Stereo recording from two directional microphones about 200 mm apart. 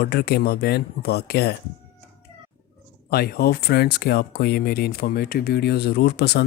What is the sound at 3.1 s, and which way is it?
Speech, 50° left (ahead or behind).